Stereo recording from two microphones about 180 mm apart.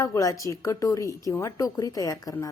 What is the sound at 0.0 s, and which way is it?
A woman's voice, 20° left (ahead or behind).